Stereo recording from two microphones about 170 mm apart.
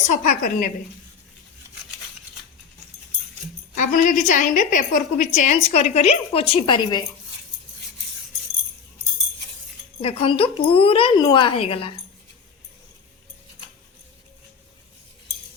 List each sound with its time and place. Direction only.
0.1 s a woman's voice: 45° left (ahead or behind)
3.8 s a woman's voice: 50° left (ahead or behind); by 7.0 s 30° left (ahead or behind)
10.0 s a woman's voice: 35° left (ahead or behind)